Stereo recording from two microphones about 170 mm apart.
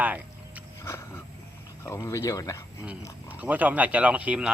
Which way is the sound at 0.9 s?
15° left (ahead or behind).